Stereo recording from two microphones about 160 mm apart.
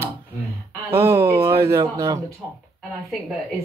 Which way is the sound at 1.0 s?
15° right (ahead or behind).